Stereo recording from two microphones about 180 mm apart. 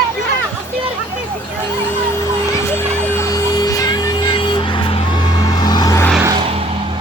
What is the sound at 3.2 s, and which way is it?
Emergency vehicle, 20° left (ahead or behind).